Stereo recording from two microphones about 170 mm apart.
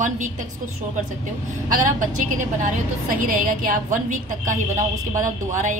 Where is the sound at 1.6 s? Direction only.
50° right (ahead or behind).